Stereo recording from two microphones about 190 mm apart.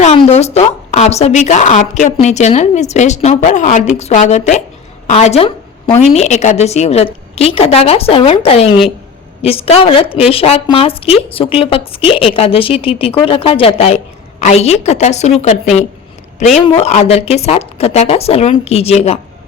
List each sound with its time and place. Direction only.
0.0 s a woman's voice: 35° left (ahead or behind)